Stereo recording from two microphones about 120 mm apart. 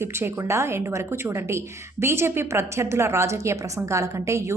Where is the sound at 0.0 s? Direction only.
20° right (ahead or behind).